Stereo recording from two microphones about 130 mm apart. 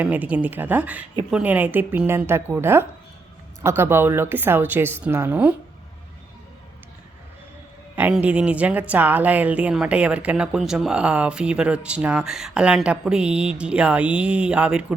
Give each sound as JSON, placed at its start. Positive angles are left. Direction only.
{"t": 0.0, "sound": "a woman's voice", "side_deg": -10}
{"t": 8.1, "sound": "a woman's voice", "side_deg": -10}